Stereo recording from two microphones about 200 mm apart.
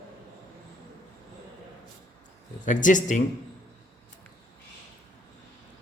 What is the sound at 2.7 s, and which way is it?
Speech, 40° left (ahead or behind).